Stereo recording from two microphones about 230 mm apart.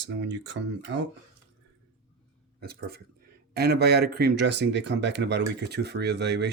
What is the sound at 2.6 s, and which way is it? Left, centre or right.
Speech, right.